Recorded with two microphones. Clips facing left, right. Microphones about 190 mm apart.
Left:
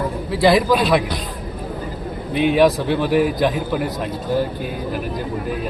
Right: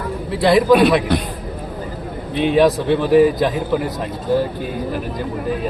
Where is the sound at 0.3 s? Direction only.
5° left (ahead or behind).